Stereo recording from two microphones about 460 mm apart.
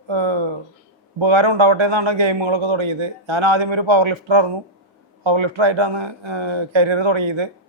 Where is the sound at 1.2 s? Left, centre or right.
Right.